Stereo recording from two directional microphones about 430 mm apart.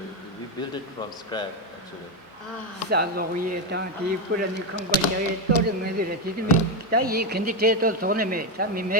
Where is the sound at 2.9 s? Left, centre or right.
Right.